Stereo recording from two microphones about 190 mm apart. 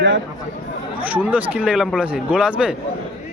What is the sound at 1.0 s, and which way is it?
A man's voice, 10° right (ahead or behind).